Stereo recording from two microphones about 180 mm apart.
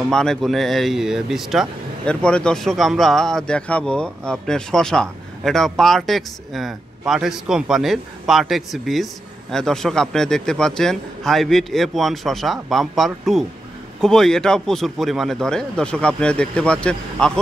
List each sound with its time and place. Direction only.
0.0 s speech: 5° left (ahead or behind)